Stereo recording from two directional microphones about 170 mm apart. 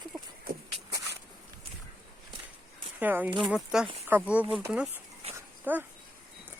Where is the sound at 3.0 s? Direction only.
10° right (ahead or behind).